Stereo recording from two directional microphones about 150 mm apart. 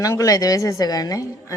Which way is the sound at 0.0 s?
20° left (ahead or behind).